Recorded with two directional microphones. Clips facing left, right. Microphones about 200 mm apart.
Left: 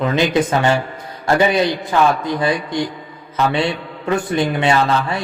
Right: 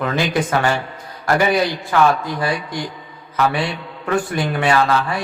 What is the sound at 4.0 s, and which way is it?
A man's voice, 25° left (ahead or behind).